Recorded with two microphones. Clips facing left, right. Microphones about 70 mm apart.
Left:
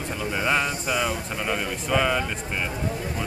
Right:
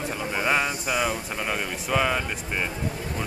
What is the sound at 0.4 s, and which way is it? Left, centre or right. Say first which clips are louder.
Speech: even; centre.